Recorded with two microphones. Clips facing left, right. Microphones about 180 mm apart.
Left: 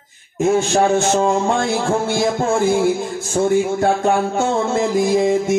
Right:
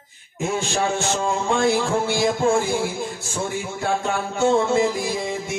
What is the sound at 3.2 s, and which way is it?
Music, 55° left (ahead or behind).